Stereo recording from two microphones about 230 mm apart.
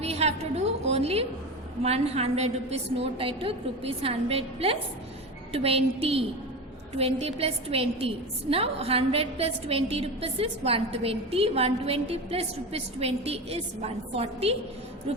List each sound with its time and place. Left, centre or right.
0.0 s a woman's voice: right